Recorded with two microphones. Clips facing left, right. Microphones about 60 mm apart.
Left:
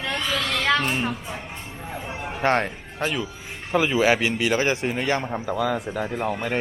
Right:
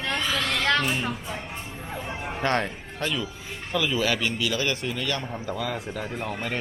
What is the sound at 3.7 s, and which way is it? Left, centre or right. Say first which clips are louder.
Speech: left 6 dB; left.